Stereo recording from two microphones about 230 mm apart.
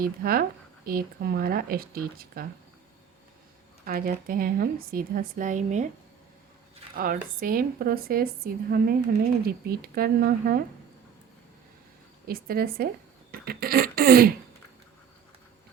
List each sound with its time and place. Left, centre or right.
0.0 s a woman's voice: right
3.8 s a woman's voice: right
6.9 s a woman's voice: right
12.2 s a woman's voice: right